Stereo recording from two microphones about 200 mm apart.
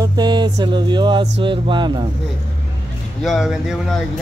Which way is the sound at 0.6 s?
20° right (ahead or behind).